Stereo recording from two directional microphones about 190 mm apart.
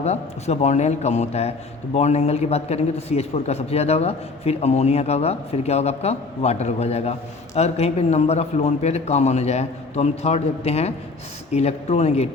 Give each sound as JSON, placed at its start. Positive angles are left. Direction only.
{"t": 0.0, "sound": "a man's voice", "side_deg": 35}